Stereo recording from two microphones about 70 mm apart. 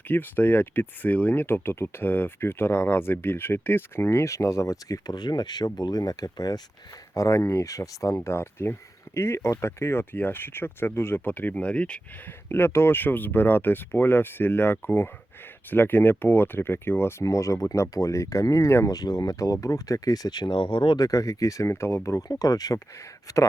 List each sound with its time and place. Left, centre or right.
0.1 s speech: left
5.1 s speech: left
5.8 s speech: left
7.1 s speech: left; by 11.9 s centre
12.5 s speech: left
17.2 s speech: left
18.9 s speech: left
20.9 s speech: left